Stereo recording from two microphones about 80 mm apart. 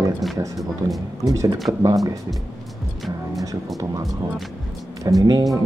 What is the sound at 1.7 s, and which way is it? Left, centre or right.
Speech, right.